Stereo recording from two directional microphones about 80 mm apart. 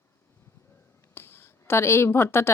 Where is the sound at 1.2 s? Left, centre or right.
Left.